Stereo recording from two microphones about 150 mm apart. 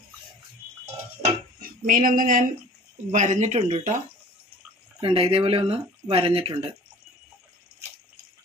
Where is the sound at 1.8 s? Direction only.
65° right (ahead or behind).